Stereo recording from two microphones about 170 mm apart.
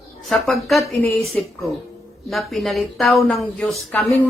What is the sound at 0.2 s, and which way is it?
A woman's voice, centre (ahead or behind).